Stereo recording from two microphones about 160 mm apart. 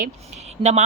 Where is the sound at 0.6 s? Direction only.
45° right (ahead or behind).